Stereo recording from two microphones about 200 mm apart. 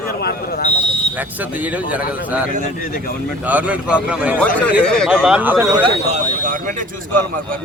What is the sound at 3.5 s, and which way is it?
Speech, 5° right (ahead or behind).